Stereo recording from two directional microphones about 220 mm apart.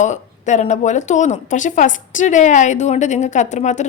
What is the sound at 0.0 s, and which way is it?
Speech, 35° left (ahead or behind).